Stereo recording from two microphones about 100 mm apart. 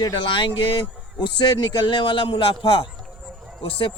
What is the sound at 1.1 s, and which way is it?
A man's voice, 45° left (ahead or behind).